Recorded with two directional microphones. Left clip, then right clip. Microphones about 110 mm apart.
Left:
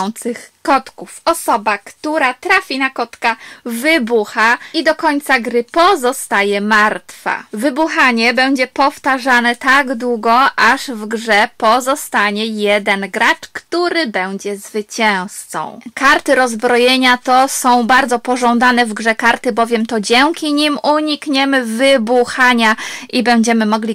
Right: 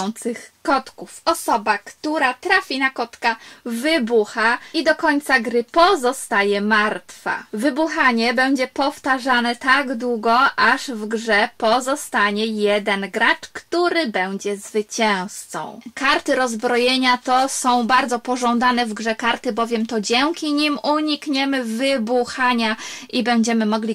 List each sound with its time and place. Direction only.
0.0 s speech: 40° left (ahead or behind)